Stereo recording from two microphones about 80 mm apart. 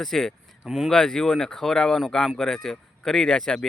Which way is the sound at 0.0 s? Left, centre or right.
Centre.